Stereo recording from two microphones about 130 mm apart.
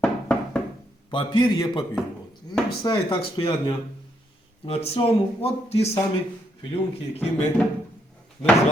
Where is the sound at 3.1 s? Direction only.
45° left (ahead or behind).